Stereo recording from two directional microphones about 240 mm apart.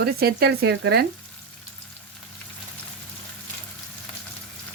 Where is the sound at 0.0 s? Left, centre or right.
Right.